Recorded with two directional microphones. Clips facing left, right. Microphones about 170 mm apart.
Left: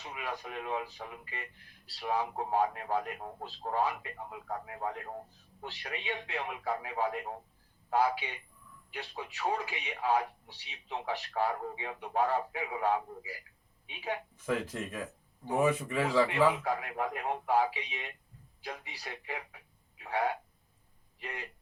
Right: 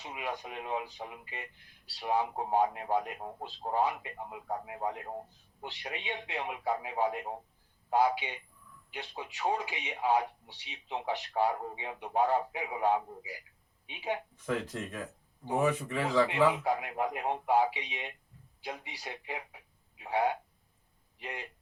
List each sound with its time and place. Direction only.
0.0 s speech: 20° right (ahead or behind)
14.3 s speech: 10° left (ahead or behind)
16.5 s speech: 20° right (ahead or behind)